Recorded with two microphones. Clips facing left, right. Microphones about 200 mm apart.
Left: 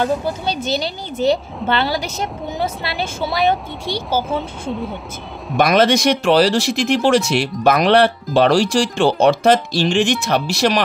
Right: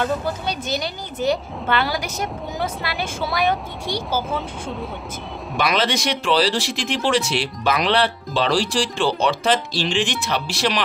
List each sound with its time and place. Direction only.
0.0 s speech: 30° left (ahead or behind)
4.3 s speech: centre (ahead or behind)
5.6 s speech: 45° left (ahead or behind)